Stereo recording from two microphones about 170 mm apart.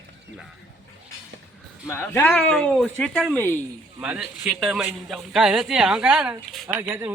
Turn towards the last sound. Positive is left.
turn(degrees=-15)  # may be behind; listen again after turning